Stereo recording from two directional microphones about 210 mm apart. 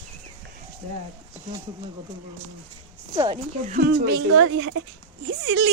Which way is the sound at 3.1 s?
25° right (ahead or behind).